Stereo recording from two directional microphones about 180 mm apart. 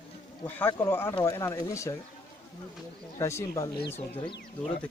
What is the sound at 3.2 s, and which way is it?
Speech, 15° left (ahead or behind).